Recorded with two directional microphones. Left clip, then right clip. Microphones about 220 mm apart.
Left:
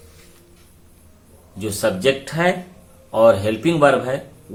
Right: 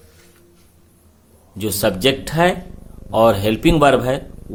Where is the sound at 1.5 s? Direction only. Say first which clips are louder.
Right 2 dB; 45° right (ahead or behind).